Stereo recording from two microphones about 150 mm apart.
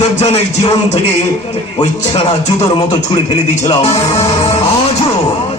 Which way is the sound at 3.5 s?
45° left (ahead or behind).